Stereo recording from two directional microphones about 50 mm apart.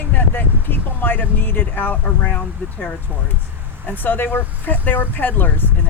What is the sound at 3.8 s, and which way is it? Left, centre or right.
Speech, left.